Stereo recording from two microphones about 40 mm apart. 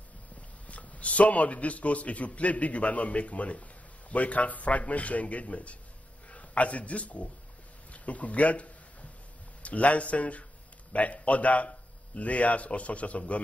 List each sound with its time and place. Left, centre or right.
0.7 s a man's voice: left